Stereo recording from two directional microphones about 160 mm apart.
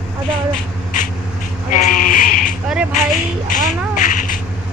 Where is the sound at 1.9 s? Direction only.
55° left (ahead or behind).